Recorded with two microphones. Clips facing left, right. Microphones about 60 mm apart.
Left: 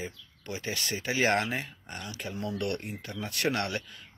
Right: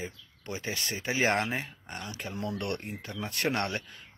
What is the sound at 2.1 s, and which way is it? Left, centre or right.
Speech, right.